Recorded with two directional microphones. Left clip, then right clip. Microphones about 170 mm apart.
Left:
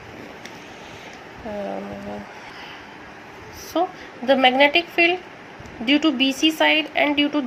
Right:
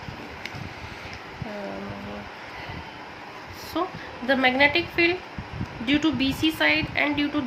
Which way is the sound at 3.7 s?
20° left (ahead or behind).